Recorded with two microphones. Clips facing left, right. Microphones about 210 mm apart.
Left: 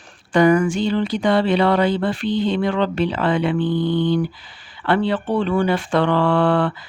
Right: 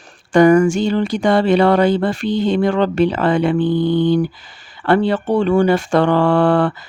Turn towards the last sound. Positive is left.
turn(degrees=-45)  # may be behind; listen again after turning